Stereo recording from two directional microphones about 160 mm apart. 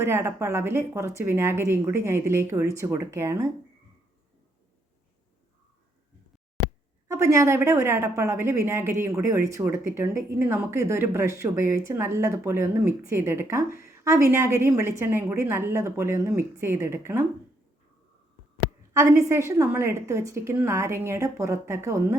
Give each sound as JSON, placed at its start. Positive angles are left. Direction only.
{"t": 0.0, "sound": "a woman's voice", "side_deg": -15}
{"t": 7.1, "sound": "a woman's voice", "side_deg": -20}
{"t": 18.9, "sound": "a woman's voice", "side_deg": -20}